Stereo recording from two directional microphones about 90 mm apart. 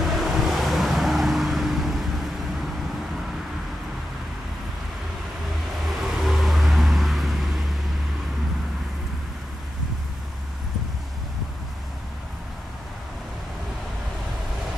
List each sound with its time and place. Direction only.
0.0 s vehicle: centre (ahead or behind)
6.2 s vehicle: centre (ahead or behind)